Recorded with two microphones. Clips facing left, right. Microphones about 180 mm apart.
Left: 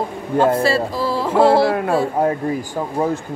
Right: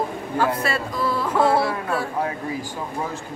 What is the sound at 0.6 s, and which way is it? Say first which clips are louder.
Music: left 6 dB; 30° left (ahead or behind).